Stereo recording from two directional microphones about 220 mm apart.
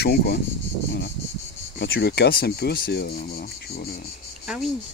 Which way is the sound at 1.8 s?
50° left (ahead or behind).